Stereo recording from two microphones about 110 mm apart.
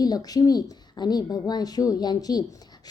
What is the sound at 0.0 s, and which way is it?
A woman's voice, 35° left (ahead or behind).